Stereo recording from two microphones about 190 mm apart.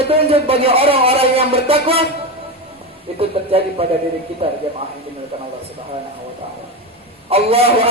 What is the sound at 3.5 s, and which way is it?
A man's voice, 30° right (ahead or behind).